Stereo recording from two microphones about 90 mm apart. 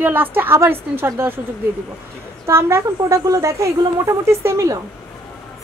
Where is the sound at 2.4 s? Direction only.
30° right (ahead or behind).